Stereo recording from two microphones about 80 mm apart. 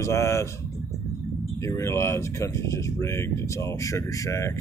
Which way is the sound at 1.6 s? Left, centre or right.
Left.